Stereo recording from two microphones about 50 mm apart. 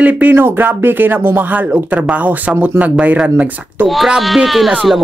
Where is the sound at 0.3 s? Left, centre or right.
Right.